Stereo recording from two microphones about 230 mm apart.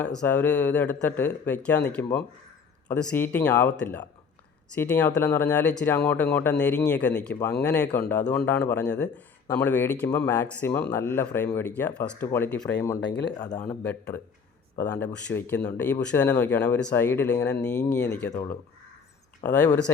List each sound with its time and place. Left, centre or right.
0.0 s speech: centre
13.1 s speech: left
13.6 s speech: centre
19.4 s speech: centre